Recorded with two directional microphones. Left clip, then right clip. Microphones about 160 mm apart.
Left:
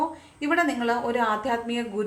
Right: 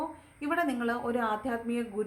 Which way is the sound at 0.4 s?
20° right (ahead or behind).